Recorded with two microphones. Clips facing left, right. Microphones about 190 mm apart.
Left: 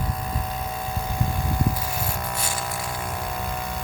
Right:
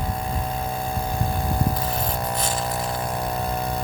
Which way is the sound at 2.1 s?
35° right (ahead or behind).